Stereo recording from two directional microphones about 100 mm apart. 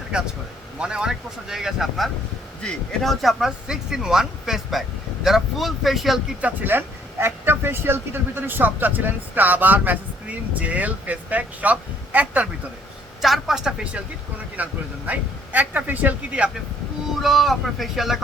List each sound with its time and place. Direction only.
0.1 s speech: 10° right (ahead or behind)
6.4 s speech: 20° right (ahead or behind)
13.2 s speech: centre (ahead or behind)
17.2 s speech: centre (ahead or behind)